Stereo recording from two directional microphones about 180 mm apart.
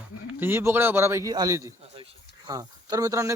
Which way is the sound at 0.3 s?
10° right (ahead or behind).